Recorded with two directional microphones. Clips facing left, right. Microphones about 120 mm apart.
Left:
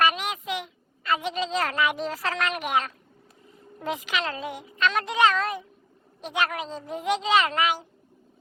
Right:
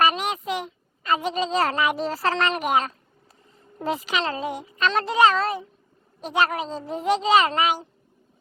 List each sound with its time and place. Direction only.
0.0 s a sound: 40° right (ahead or behind)
1.1 s speech: 40° right (ahead or behind)
3.9 s speech: 40° right (ahead or behind)